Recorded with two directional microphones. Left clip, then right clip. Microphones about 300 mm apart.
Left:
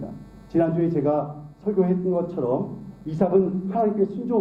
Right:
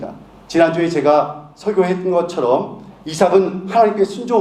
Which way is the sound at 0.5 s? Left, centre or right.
Centre.